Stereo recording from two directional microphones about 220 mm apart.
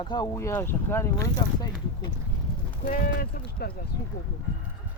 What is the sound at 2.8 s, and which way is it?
Speech, 40° left (ahead or behind).